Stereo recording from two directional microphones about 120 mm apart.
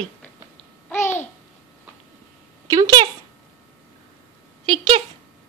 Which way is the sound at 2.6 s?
30° right (ahead or behind).